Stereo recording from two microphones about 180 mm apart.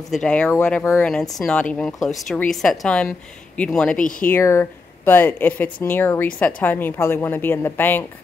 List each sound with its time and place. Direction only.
0.1 s a woman's voice: 5° left (ahead or behind)